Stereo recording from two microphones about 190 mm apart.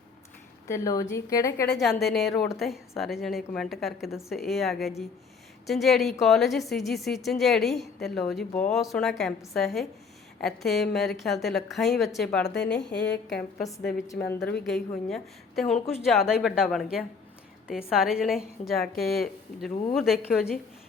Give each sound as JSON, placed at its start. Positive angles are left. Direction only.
{"t": 0.7, "sound": "a woman's voice", "side_deg": 15}
{"t": 1.8, "sound": "a woman's voice", "side_deg": 0}
{"t": 14.1, "sound": "a woman's voice", "side_deg": 15}
{"t": 14.3, "sound": "a woman's voice", "side_deg": 60}
{"t": 14.6, "sound": "a woman's voice", "side_deg": 0}